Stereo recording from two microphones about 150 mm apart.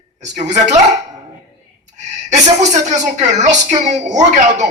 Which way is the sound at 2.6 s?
50° right (ahead or behind).